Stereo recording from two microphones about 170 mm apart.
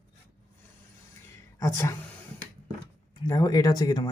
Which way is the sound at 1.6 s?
15° left (ahead or behind).